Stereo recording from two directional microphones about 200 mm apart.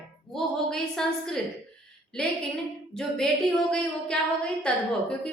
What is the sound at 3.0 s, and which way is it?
Speech, 5° left (ahead or behind).